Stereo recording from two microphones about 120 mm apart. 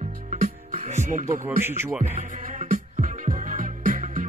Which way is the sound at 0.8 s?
80° right.